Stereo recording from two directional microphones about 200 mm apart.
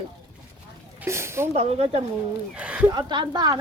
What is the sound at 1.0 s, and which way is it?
Speech, 15° right (ahead or behind).